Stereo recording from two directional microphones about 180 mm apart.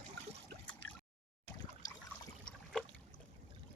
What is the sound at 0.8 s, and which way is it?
Drip, 75° right (ahead or behind).